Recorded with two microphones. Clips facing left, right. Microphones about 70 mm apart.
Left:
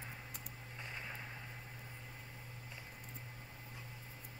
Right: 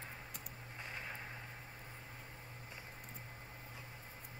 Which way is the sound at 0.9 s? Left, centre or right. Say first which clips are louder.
Right 1 dB; centre.